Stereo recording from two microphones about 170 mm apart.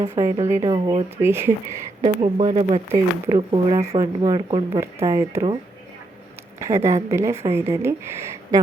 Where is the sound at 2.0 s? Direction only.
30° right (ahead or behind).